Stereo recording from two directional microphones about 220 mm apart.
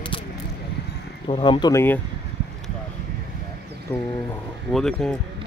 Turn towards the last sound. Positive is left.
turn(degrees=0)  # may be behind; listen again after turning